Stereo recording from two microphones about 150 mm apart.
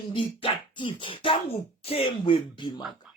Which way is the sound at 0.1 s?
35° left (ahead or behind).